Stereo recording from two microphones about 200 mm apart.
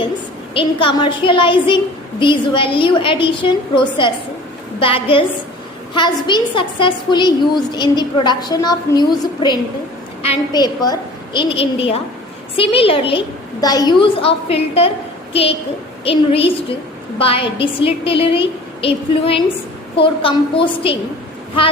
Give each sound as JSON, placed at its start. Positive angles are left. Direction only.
{"t": 0.5, "sound": "a woman's voice", "side_deg": 25}